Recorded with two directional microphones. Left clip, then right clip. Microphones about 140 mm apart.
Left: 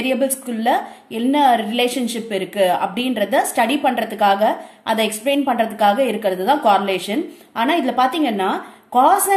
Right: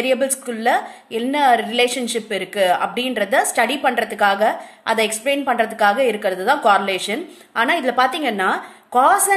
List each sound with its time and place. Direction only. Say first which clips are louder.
0.0 s a woman's voice: right 1 dB; 25° right (ahead or behind)